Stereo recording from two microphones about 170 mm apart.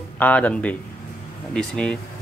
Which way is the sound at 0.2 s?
10° left (ahead or behind).